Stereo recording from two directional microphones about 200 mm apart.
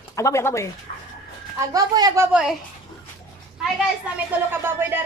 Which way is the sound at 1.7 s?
20° right (ahead or behind).